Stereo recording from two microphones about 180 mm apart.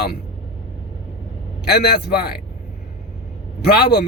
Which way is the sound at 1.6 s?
60° left (ahead or behind).